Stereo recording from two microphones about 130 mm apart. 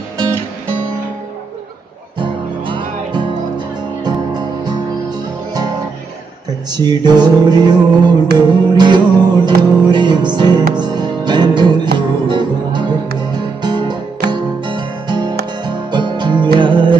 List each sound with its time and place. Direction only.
2.1 s music: 40° right (ahead or behind)